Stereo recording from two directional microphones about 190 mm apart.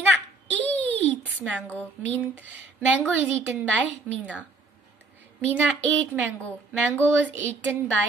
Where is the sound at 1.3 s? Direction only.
10° right (ahead or behind).